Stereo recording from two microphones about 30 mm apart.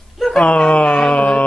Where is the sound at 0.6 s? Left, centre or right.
Left.